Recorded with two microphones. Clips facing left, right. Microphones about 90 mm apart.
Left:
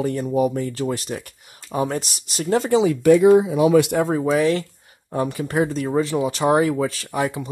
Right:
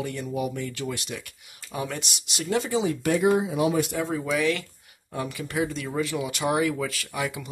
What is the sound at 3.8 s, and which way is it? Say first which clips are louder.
Speech: left 9 dB; 65° left (ahead or behind).